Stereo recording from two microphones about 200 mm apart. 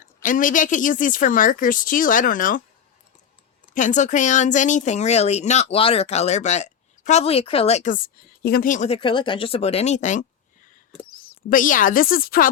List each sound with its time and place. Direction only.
0.2 s speech: 40° left (ahead or behind)
3.8 s speech: 40° left (ahead or behind)